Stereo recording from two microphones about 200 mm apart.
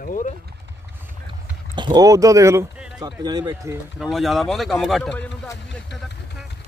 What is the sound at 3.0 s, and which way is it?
Speech, 20° right (ahead or behind).